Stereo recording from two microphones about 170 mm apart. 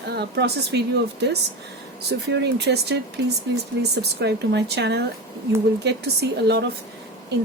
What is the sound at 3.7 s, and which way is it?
Speech, 90° right.